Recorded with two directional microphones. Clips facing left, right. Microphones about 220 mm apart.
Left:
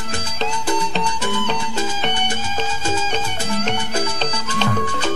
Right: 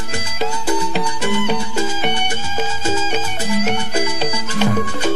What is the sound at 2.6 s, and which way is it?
Music, 10° right (ahead or behind).